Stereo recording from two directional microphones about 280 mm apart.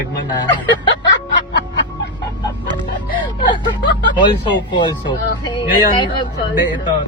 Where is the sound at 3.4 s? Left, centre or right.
Centre.